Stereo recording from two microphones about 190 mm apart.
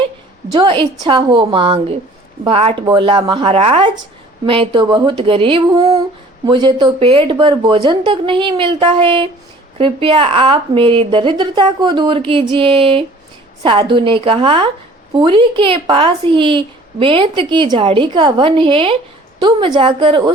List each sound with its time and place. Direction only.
0.5 s a woman's voice: 25° right (ahead or behind)